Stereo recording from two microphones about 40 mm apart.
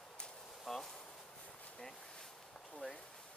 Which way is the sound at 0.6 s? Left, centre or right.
Centre.